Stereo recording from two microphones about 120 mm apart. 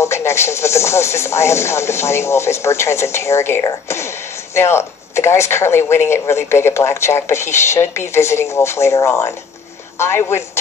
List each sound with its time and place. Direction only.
0.0 s speech: 20° left (ahead or behind)